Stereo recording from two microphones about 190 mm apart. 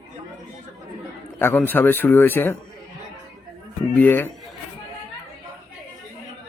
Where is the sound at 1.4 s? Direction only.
10° left (ahead or behind).